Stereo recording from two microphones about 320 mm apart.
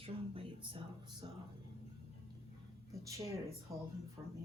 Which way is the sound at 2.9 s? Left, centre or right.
Centre.